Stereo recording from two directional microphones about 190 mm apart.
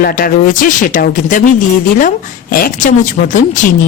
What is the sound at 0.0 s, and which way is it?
Speech, 50° left (ahead or behind).